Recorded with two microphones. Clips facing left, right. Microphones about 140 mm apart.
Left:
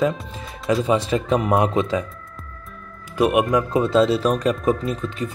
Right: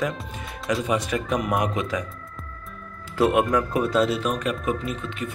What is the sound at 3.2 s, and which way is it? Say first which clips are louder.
Speech: left 2 dB; 20° left (ahead or behind).